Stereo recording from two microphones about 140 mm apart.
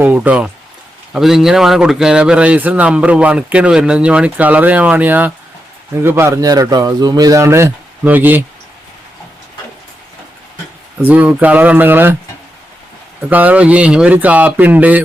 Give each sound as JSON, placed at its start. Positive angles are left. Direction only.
{"t": 0.0, "sound": "a man's voice", "side_deg": -10}
{"t": 11.0, "sound": "a man's voice", "side_deg": -10}
{"t": 13.3, "sound": "a man's voice", "side_deg": -10}